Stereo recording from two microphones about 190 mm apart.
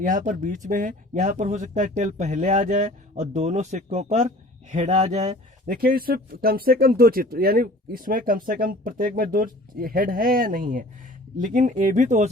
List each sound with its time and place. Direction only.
0.0 s speech: 45° right (ahead or behind)